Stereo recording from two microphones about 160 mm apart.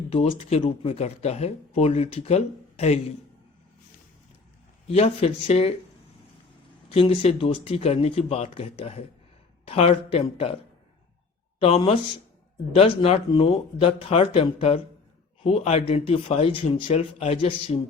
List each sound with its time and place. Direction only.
0.1 s speech: 40° left (ahead or behind)
4.9 s speech: 40° left (ahead or behind)
6.9 s speech: 40° left (ahead or behind)
12.7 s speech: 35° left (ahead or behind)